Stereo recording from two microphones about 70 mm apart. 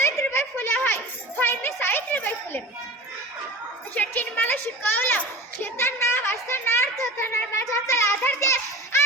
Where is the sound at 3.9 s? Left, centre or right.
Left.